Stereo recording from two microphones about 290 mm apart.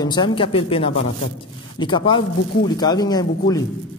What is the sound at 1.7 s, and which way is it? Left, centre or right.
A man's voice, centre.